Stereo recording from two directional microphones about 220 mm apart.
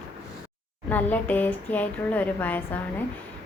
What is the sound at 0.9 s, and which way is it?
A woman's voice, 5° left (ahead or behind).